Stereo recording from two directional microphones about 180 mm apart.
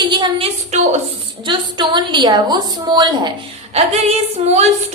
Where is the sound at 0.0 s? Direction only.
25° right (ahead or behind).